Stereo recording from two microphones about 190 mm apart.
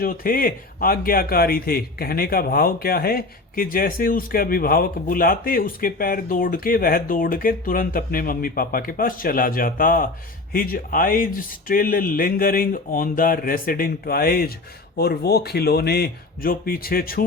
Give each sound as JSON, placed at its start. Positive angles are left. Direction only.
{"t": 0.0, "sound": "speech", "side_deg": 50}